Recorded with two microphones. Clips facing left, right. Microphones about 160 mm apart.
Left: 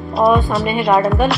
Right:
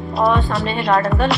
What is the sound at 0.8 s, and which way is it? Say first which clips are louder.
Speech: left 2 dB; centre (ahead or behind).